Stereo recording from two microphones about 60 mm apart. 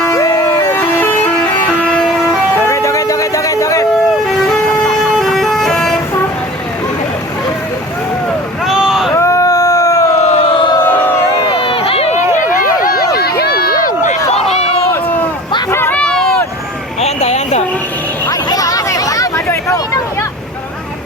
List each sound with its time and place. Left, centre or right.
0.1 s emergency vehicle: left
0.7 s vehicle: left
1.8 s vehicle: centre
2.6 s music: left
5.1 s vehicle: centre
8.6 s vehicle: centre
9.1 s a sound: left
10.8 s crowd: left
15.9 s a sound: left
16.1 s vehicle: centre
18.3 s chatter: left
19.5 s a sound: left